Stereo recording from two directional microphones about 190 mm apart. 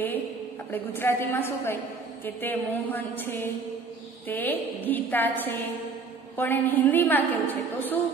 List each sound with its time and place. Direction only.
0.7 s a woman's voice: 10° left (ahead or behind)